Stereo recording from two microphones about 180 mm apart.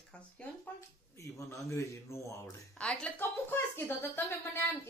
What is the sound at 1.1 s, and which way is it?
Speech, 15° left (ahead or behind).